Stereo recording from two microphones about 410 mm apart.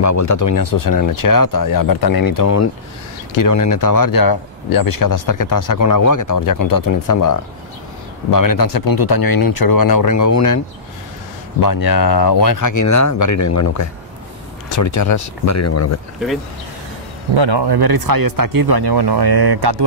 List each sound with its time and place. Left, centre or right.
0.0 s speech: left
11.6 s speech: left
17.4 s speech: right